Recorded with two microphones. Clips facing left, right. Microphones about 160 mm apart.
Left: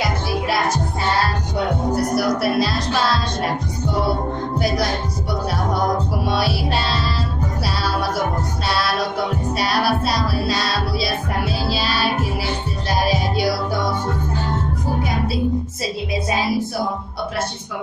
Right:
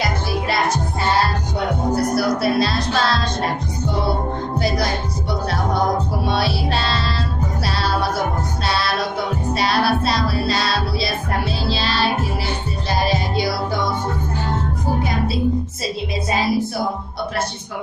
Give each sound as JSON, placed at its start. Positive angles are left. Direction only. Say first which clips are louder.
{"t": 2.1, "sound": "speech", "louder": "even", "side_deg": 15}
{"t": 6.3, "sound": "music", "louder": "even", "side_deg": 10}
{"t": 9.6, "sound": "music", "louder": "right 1 dB", "side_deg": 10}
{"t": 11.7, "sound": "music", "louder": "right 2 dB", "side_deg": 10}